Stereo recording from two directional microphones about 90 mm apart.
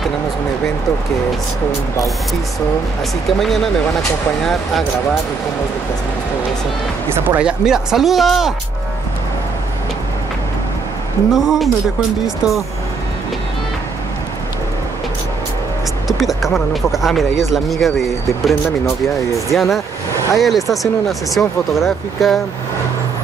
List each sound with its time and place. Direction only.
3.3 s speech: centre (ahead or behind)
7.1 s speech: 25° right (ahead or behind)
7.3 s speech: 10° right (ahead or behind)
11.3 s speech: 5° right (ahead or behind)
16.1 s speech: centre (ahead or behind)